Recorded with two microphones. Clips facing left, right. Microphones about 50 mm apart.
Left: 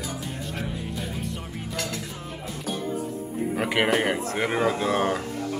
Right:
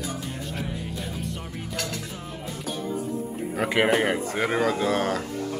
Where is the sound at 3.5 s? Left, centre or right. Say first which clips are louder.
Right 1 dB; centre.